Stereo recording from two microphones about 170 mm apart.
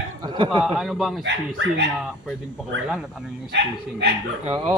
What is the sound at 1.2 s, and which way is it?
Speech, 90° right.